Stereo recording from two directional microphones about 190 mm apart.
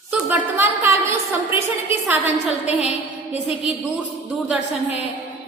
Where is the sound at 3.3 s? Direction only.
30° left (ahead or behind).